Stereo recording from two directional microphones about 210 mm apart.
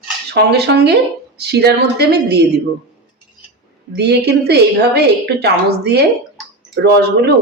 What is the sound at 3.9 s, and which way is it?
A woman's voice, 50° right (ahead or behind).